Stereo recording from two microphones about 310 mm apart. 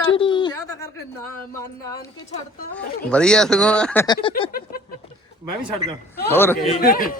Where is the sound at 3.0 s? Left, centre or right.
Centre.